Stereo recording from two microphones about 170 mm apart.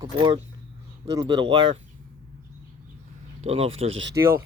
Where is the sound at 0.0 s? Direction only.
25° right (ahead or behind).